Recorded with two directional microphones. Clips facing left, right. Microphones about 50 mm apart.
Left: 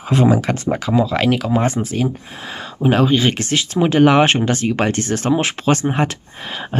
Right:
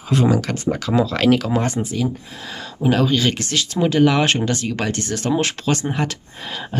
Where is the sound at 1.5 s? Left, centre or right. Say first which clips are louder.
Left 3 dB; left.